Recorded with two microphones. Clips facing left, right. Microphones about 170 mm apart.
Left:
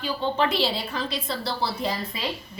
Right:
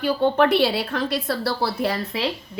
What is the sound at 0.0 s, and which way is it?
A woman's voice, 60° right (ahead or behind).